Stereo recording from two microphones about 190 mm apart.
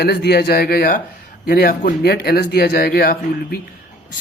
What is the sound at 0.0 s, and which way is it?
Speech, 60° left (ahead or behind).